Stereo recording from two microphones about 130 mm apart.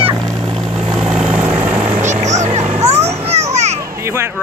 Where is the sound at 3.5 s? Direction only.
60° right (ahead or behind).